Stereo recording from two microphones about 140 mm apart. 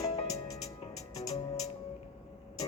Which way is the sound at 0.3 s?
25° left (ahead or behind).